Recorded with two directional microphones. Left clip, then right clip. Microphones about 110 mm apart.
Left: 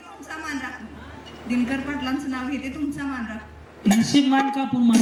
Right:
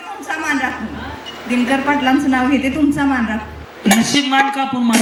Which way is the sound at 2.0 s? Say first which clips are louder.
Right 13 dB; 30° left (ahead or behind).